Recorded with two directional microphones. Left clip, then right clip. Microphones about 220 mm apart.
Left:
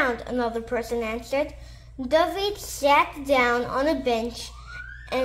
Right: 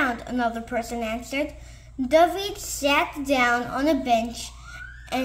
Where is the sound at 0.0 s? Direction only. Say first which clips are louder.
Even; 10° left (ahead or behind).